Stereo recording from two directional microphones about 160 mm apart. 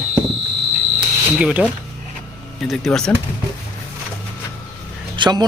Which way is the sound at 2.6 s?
Centre (ahead or behind).